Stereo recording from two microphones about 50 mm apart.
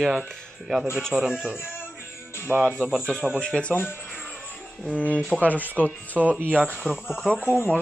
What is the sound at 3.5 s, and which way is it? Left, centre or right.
Speech, left.